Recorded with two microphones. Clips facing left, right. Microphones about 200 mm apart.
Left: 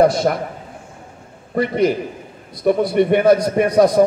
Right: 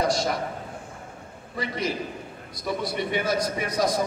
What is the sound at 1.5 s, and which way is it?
A man's voice, 55° left (ahead or behind).